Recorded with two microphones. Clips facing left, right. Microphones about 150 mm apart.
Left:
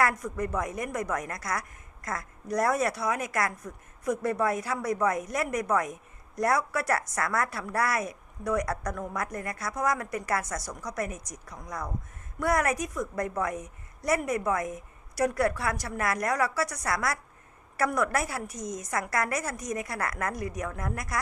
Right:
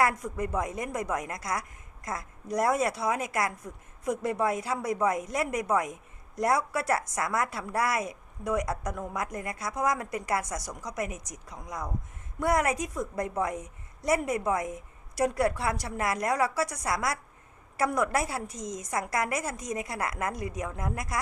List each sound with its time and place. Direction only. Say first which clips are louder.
0.0 s a woman's voice: even; 20° right (ahead or behind)